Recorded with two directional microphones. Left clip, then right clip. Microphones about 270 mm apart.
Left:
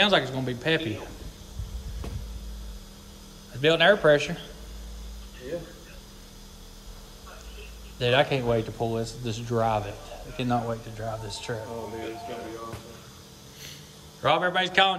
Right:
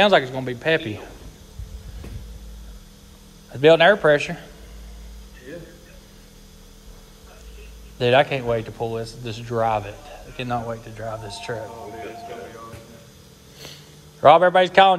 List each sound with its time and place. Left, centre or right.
0.4 s speech: centre
3.5 s speech: centre
8.0 s speech: centre
14.2 s speech: centre